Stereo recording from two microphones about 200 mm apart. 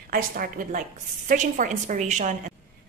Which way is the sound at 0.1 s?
45° right (ahead or behind).